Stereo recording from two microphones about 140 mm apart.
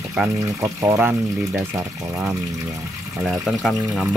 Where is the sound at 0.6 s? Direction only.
20° right (ahead or behind).